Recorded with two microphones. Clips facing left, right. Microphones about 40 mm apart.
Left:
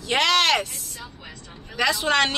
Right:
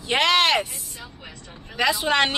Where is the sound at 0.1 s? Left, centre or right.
Centre.